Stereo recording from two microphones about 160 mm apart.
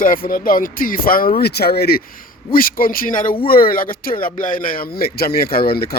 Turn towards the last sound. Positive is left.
turn(degrees=75)  # may be behind; listen again after turning